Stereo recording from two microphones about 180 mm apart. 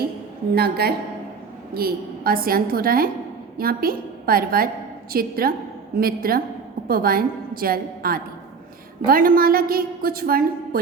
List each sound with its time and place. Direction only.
0.5 s a woman's voice: 60° right (ahead or behind)